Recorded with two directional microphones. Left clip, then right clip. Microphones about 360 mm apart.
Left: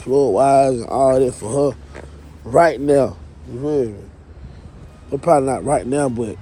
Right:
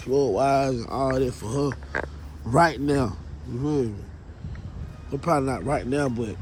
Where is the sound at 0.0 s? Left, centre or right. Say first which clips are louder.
Left 7 dB; centre.